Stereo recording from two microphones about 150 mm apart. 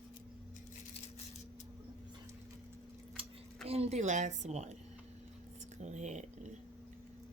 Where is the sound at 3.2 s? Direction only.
35° right (ahead or behind).